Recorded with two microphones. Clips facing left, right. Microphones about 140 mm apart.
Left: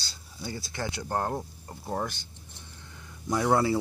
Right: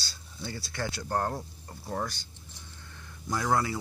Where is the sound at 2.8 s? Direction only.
15° left (ahead or behind).